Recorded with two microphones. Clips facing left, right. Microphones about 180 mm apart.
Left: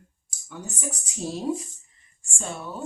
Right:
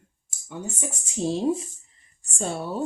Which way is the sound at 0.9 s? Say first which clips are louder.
Right 7 dB; 25° right (ahead or behind).